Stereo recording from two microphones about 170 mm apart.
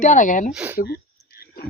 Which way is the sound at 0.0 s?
50° left (ahead or behind).